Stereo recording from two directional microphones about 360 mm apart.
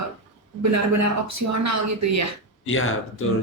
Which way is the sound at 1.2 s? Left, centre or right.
Right.